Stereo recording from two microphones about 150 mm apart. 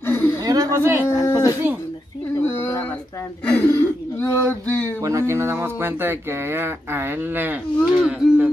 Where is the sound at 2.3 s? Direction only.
15° left (ahead or behind).